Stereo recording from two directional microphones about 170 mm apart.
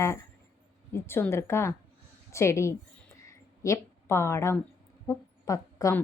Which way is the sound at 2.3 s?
15° left (ahead or behind).